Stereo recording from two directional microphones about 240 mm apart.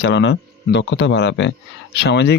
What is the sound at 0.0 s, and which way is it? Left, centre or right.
Speech, left.